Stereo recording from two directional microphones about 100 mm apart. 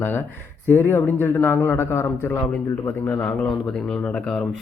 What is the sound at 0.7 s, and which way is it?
A man's voice, 20° left (ahead or behind).